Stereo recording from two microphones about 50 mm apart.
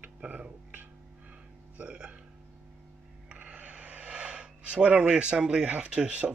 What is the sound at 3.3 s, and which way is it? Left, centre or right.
Speech, right.